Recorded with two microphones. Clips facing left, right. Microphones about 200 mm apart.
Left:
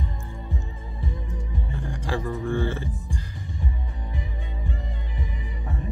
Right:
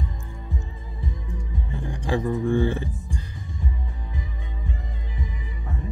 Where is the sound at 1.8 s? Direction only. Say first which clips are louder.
Right 4 dB; 15° right (ahead or behind).